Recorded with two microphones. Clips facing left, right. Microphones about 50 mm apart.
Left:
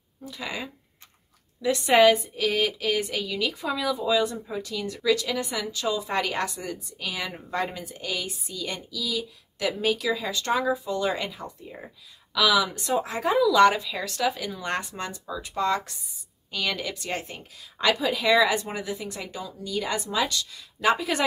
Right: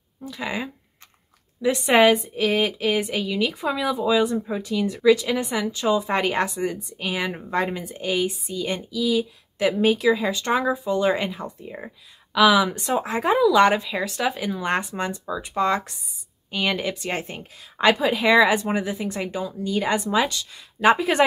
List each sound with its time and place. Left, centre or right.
0.2 s speech: right